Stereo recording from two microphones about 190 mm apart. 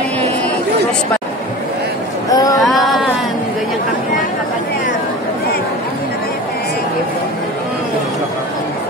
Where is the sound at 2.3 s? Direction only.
20° left (ahead or behind).